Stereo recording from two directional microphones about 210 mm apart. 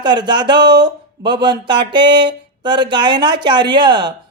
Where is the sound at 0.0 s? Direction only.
20° right (ahead or behind).